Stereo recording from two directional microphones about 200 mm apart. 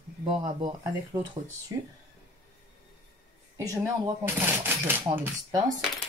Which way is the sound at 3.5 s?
15° right (ahead or behind).